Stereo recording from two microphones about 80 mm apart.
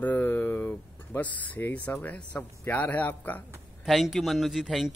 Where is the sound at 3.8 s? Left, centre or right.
Centre.